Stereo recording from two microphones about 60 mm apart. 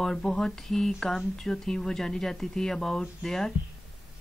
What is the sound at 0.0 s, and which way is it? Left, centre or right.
Speech, centre.